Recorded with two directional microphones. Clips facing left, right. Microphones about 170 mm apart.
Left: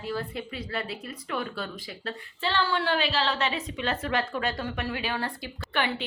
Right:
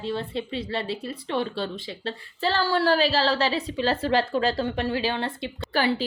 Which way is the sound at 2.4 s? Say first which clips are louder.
Right 4 dB; 40° right (ahead or behind).